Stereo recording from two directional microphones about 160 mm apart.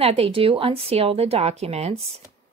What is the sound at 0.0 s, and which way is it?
A woman's voice, 35° right (ahead or behind).